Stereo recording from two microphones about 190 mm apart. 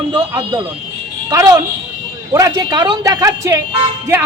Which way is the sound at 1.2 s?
20° right (ahead or behind).